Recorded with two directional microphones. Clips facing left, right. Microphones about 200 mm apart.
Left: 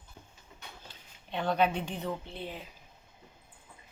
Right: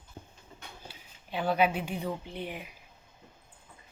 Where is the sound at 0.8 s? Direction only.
5° right (ahead or behind).